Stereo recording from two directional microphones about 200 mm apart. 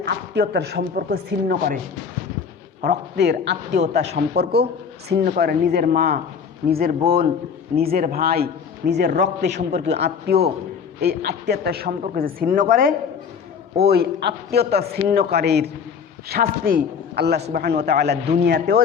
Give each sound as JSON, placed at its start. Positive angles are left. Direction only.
{"t": 0.0, "sound": "a woman's voice", "side_deg": -55}
{"t": 2.8, "sound": "a man's voice", "side_deg": -55}
{"t": 9.6, "sound": "a man's voice", "side_deg": -35}
{"t": 10.0, "sound": "a woman's voice", "side_deg": -55}
{"t": 13.8, "sound": "a woman's voice", "side_deg": -55}